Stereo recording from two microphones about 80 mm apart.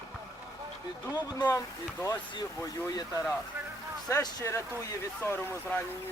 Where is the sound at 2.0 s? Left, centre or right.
Left.